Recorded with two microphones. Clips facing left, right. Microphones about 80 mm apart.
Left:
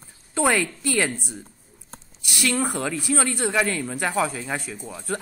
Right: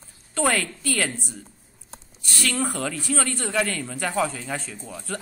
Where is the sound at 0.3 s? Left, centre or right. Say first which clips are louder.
Left 2 dB; centre.